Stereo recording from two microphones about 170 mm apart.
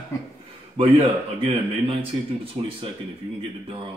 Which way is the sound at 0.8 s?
30° right (ahead or behind).